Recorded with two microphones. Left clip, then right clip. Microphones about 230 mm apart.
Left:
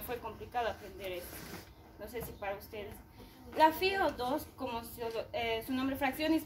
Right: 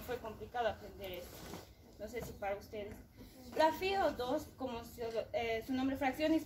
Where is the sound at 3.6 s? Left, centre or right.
Left.